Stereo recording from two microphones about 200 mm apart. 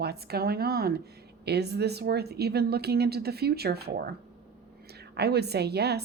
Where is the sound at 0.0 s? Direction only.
50° right (ahead or behind).